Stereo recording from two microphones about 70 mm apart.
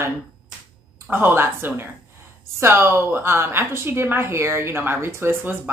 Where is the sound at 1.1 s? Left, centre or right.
Right.